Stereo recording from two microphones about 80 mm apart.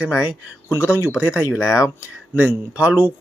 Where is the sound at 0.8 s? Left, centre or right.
Left.